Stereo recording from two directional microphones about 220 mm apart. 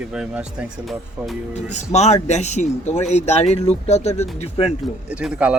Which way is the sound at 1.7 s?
30° left (ahead or behind).